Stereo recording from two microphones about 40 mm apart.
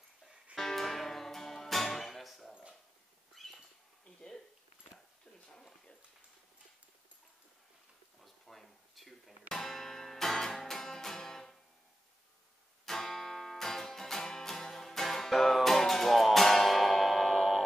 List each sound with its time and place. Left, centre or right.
0.6 s music: centre
3.3 s cat: centre
5.5 s a sound: centre
8.2 s a sound: centre
9.5 s music: centre
12.8 s music: centre